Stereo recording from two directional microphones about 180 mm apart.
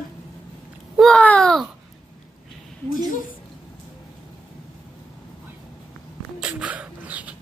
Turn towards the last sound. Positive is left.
turn(degrees=-10)  # may be behind; listen again after turning